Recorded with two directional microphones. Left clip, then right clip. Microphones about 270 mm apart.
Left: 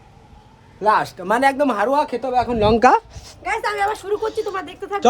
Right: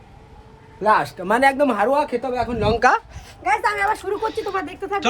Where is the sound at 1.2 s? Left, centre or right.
Centre.